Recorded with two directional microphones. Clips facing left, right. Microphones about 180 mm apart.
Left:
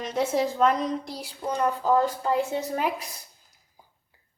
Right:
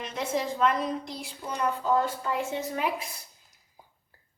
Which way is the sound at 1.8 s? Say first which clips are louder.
Left 3 dB; 35° left (ahead or behind).